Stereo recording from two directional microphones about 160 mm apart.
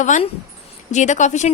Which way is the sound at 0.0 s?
50° left (ahead or behind).